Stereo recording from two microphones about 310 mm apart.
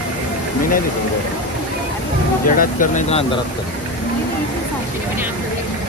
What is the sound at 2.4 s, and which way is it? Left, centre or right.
Speech, left.